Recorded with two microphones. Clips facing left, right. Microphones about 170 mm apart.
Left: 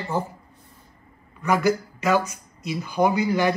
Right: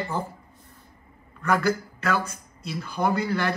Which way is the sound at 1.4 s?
10° left (ahead or behind).